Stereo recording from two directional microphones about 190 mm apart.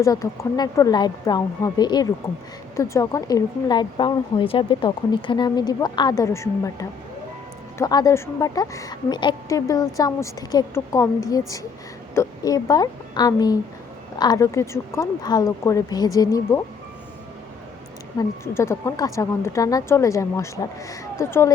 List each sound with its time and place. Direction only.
0.0 s a woman's voice: 20° left (ahead or behind)
18.2 s a woman's voice: 15° left (ahead or behind)